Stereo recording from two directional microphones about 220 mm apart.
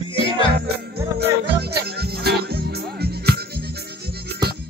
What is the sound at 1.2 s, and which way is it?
Music, 45° right (ahead or behind).